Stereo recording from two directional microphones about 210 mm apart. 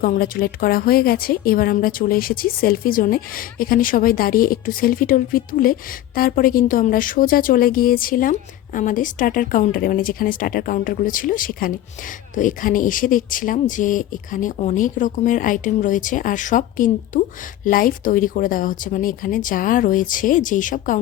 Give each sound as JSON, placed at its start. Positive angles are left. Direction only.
{"t": 0.0, "sound": "a woman's voice", "side_deg": 45}